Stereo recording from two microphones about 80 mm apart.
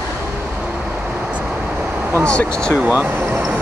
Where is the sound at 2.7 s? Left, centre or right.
Centre.